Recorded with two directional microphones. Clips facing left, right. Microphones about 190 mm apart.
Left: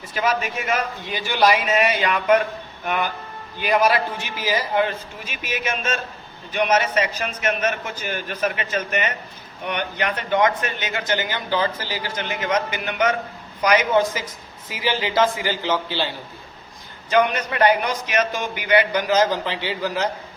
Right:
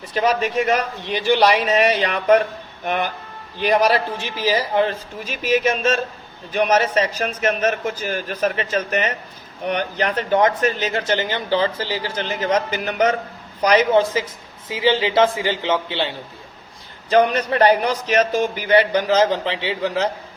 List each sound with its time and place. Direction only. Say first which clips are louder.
0.1 s speech: right 4 dB; 40° right (ahead or behind)
3.6 s speech: right 2 dB; 35° right (ahead or behind)
17.1 s speech: right 3 dB; 35° right (ahead or behind)